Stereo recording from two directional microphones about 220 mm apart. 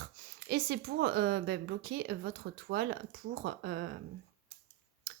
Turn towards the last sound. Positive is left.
turn(degrees=-45)  # may be behind; listen again after turning